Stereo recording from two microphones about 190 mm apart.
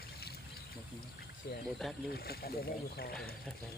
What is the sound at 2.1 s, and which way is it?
Speech, 55° left (ahead or behind).